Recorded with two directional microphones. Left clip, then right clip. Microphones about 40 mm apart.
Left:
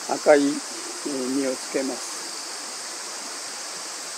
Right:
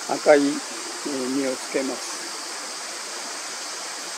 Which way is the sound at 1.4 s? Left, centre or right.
Centre.